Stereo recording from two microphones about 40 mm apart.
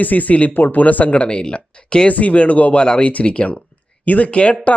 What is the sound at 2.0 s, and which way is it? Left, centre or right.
Speech, left.